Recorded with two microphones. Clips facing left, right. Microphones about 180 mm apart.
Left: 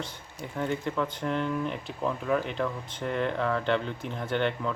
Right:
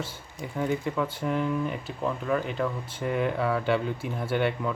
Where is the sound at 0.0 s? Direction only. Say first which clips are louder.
Right 2 dB; 5° right (ahead or behind).